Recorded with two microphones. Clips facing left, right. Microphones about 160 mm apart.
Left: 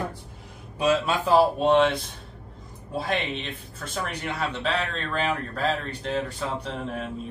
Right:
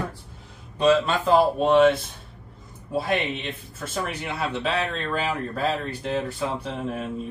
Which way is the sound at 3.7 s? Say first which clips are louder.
Right 2 dB; 5° right (ahead or behind).